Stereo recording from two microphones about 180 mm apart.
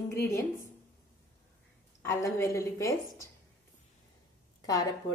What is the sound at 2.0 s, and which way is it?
A woman's voice, 15° left (ahead or behind).